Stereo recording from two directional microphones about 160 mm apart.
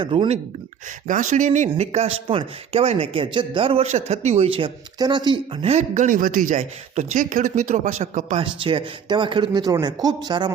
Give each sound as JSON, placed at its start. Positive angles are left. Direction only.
{"t": 0.0, "sound": "speech", "side_deg": -35}
{"t": 1.0, "sound": "speech", "side_deg": -50}
{"t": 5.7, "sound": "speech", "side_deg": -50}